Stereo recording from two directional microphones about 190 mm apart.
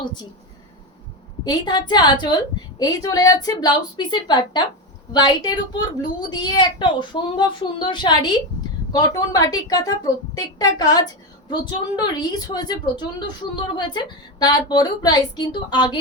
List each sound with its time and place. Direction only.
0.0 s a woman's voice: 25° left (ahead or behind)
1.5 s a woman's voice: 20° left (ahead or behind)